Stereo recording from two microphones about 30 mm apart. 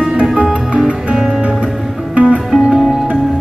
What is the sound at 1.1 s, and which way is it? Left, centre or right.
Music, centre.